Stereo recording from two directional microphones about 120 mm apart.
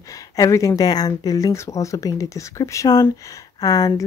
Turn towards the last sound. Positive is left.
turn(degrees=30)  # may be behind; listen again after turning